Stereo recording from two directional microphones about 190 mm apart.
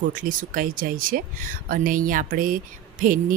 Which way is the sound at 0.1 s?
45° right (ahead or behind).